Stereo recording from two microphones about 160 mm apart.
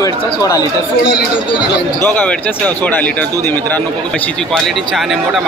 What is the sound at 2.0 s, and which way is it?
A man's voice, 5° left (ahead or behind).